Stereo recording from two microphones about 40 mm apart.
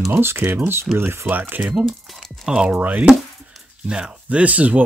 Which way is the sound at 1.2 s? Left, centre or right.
Right.